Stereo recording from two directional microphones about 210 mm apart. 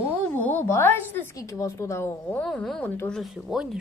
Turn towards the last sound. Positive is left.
turn(degrees=0)  # may be behind; listen again after turning